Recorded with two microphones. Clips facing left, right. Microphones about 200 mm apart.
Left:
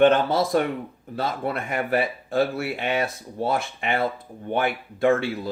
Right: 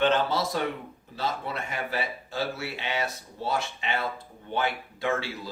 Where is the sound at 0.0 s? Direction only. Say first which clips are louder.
Left 7 dB; 50° left (ahead or behind).